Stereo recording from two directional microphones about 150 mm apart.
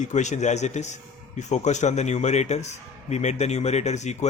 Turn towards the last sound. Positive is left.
turn(degrees=50)  # may be behind; listen again after turning